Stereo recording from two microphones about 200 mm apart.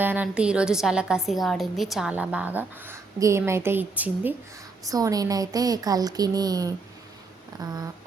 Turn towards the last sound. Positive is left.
turn(degrees=-20)  # may be behind; listen again after turning